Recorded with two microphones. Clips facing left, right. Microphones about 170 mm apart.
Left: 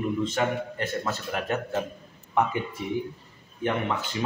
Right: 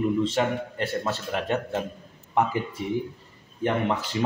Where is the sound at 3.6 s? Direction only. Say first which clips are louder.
Right 2 dB; 35° right (ahead or behind).